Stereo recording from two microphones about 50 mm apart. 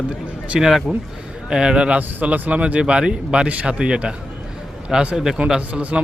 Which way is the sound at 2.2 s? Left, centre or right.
Right.